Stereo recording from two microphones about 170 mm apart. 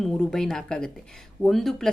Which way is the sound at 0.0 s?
Centre (ahead or behind).